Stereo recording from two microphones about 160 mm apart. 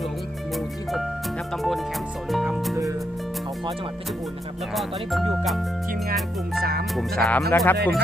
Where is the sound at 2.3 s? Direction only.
Centre (ahead or behind).